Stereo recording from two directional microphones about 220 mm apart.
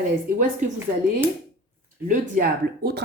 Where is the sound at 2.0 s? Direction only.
45° right (ahead or behind).